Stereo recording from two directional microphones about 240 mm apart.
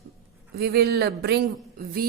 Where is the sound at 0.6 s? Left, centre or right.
Right.